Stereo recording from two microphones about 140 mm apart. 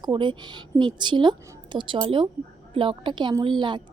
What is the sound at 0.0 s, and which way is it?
A woman's voice, 35° right (ahead or behind).